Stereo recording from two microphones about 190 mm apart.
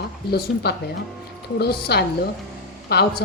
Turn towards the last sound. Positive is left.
turn(degrees=55)  # may be behind; listen again after turning